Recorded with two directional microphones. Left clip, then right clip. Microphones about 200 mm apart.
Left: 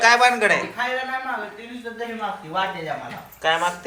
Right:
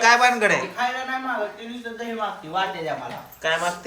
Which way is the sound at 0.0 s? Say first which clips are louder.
Left 1 dB; 20° right (ahead or behind).